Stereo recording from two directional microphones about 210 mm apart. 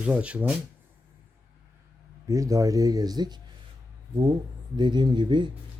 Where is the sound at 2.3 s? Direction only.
15° right (ahead or behind).